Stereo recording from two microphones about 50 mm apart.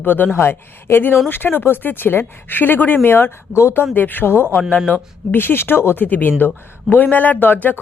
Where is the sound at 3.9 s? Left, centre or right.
Left.